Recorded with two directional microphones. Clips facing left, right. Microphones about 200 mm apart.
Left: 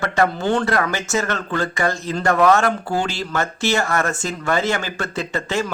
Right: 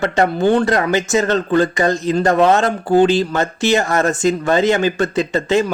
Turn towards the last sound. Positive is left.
turn(degrees=-20)  # may be behind; listen again after turning